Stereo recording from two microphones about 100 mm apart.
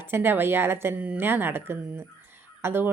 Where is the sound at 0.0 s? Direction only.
20° right (ahead or behind).